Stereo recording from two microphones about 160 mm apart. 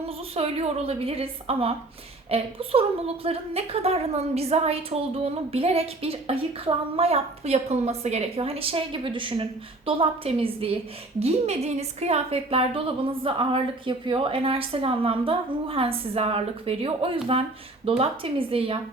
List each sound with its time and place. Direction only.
0.3 s a woman's voice: 40° right (ahead or behind)